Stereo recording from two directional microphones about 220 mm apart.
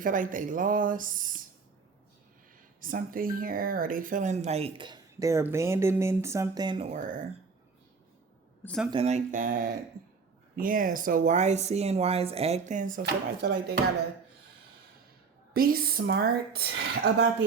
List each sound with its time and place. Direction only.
0.0 s speech: 35° right (ahead or behind)
2.8 s speech: 40° right (ahead or behind); by 6.8 s 20° right (ahead or behind)
6.9 s speech: 35° right (ahead or behind)
8.6 s speech: centre (ahead or behind)
8.9 s speech: 30° right (ahead or behind)
10.0 s a sound: 40° right (ahead or behind)
10.5 s speech: 40° right (ahead or behind)
13.0 s a woman's voice: 45° right (ahead or behind)
15.5 s a woman's voice: 40° right (ahead or behind)